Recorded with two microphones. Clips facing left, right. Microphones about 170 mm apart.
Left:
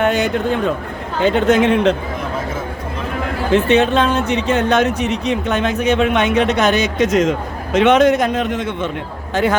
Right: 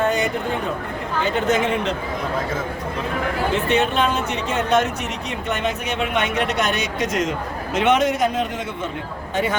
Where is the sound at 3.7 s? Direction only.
90° left.